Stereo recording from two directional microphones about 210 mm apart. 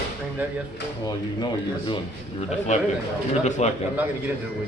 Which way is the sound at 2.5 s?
30° left (ahead or behind).